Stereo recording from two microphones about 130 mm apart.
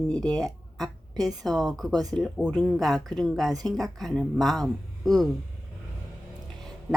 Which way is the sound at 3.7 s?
Centre (ahead or behind).